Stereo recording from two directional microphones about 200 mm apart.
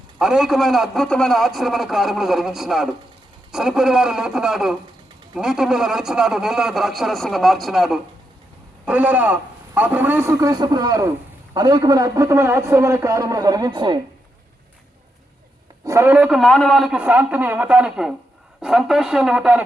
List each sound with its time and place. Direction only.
0.2 s a man's voice: centre (ahead or behind); by 14.0 s 25° right (ahead or behind)
15.8 s a man's voice: 15° right (ahead or behind)